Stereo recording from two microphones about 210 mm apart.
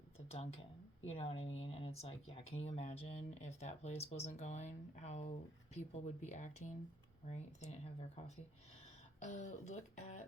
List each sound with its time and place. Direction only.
0.3 s speech: 30° left (ahead or behind)
9.2 s speech: 35° left (ahead or behind)